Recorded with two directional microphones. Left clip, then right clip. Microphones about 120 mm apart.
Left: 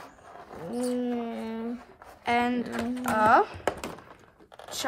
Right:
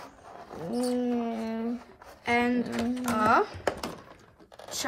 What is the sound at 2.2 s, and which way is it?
Speech, 30° left (ahead or behind).